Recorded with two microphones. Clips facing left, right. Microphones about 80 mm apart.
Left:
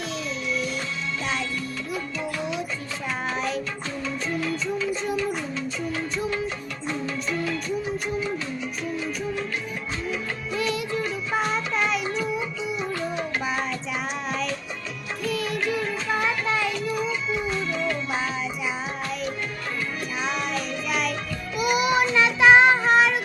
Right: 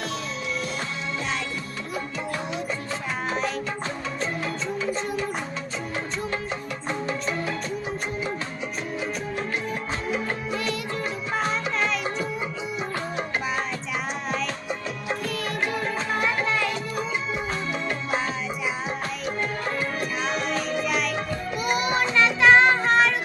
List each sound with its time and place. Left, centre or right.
3.3 s music: centre
4.4 s music: right
10.5 s music of bollywood: centre
11.3 s music: centre
12.0 s music: right
15.2 s music: centre
16.7 s music: right
20.2 s music: centre
21.8 s child singing: centre